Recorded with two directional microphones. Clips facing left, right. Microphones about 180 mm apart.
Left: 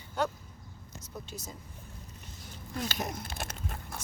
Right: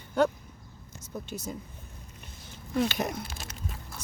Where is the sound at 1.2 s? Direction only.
60° right (ahead or behind).